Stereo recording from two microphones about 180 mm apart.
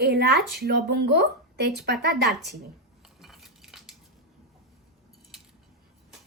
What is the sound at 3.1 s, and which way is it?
Cutlery, centre (ahead or behind).